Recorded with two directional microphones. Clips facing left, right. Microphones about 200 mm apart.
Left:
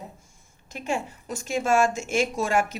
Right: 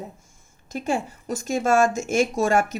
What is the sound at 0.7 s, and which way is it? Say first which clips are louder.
A woman's voice: right 4 dB; 40° right (ahead or behind).